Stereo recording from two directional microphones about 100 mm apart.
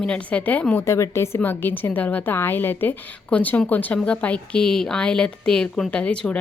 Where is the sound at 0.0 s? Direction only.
10° left (ahead or behind).